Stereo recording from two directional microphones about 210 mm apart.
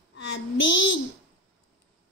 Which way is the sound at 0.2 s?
60° left (ahead or behind).